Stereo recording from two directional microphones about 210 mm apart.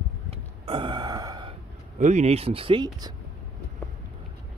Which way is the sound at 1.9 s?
35° right (ahead or behind).